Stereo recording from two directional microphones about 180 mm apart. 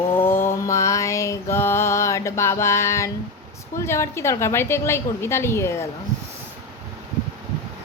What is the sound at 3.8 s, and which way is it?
A woman's voice, 15° left (ahead or behind).